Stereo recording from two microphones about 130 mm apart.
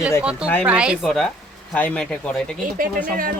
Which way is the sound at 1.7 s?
10° left (ahead or behind).